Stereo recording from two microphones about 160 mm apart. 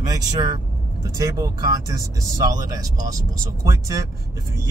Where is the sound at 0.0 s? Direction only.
25° right (ahead or behind).